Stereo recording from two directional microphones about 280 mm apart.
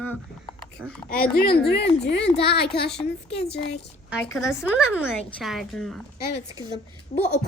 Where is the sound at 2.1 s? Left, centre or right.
Left.